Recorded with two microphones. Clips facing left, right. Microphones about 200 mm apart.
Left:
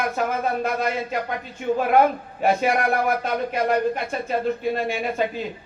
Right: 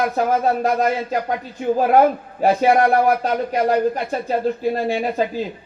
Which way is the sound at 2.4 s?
35° right (ahead or behind).